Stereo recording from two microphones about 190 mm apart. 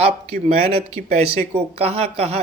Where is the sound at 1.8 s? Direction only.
30° right (ahead or behind).